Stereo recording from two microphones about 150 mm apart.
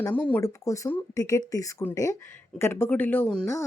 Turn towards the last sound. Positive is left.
turn(degrees=10)  # may be behind; listen again after turning